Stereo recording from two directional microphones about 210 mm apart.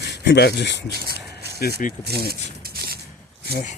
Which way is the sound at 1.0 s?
50° right (ahead or behind).